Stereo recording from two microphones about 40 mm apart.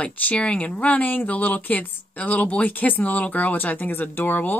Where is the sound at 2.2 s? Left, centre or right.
Left.